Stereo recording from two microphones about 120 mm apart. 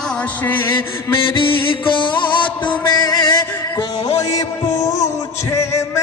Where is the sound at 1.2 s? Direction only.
45° left (ahead or behind).